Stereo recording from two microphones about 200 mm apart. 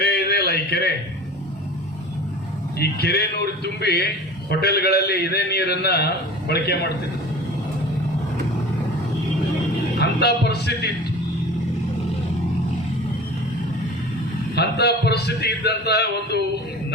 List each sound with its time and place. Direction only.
0.0 s a sound: 50° left (ahead or behind)
2.7 s a man's voice: 55° left (ahead or behind)
10.0 s music: 55° left (ahead or behind)
14.5 s a man's voice: 55° left (ahead or behind)